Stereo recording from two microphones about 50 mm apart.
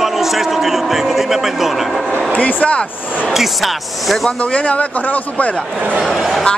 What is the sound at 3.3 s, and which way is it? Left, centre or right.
A man's voice, centre.